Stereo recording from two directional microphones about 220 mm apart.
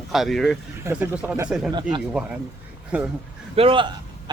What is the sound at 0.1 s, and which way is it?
A man's voice, centre (ahead or behind).